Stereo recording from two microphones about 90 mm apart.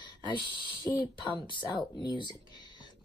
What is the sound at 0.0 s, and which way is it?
Speech, 60° left (ahead or behind).